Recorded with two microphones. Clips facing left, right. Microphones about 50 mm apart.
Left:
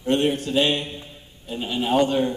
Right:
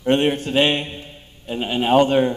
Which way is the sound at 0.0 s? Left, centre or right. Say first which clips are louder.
Right 3 dB; right.